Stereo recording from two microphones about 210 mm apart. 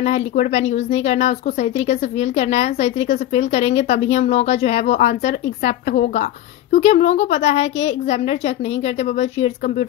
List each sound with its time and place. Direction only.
0.0 s a woman's voice: 30° left (ahead or behind)